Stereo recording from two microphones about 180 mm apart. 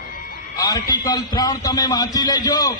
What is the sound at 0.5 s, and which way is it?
A man's voice, 20° left (ahead or behind).